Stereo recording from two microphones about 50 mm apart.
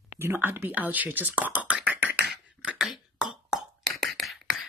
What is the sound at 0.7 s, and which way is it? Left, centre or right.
Speech, right.